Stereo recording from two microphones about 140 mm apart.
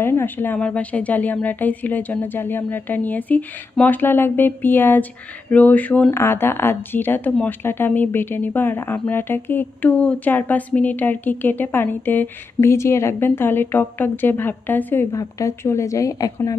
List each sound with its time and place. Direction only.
0.0 s a woman's voice: 15° left (ahead or behind)